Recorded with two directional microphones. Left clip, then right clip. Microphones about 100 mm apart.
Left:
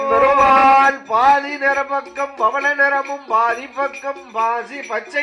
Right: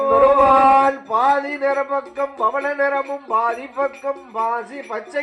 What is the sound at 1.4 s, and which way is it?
Speech, 30° right (ahead or behind).